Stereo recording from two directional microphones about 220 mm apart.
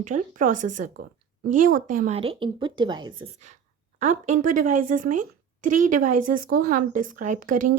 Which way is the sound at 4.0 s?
35° right (ahead or behind).